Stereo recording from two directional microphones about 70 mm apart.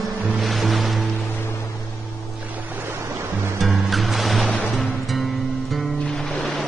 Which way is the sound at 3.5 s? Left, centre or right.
Centre.